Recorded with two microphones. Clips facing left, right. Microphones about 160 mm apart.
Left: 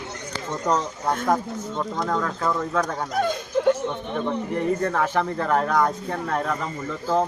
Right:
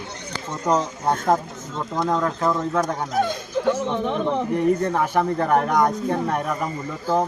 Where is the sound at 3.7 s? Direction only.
90° right.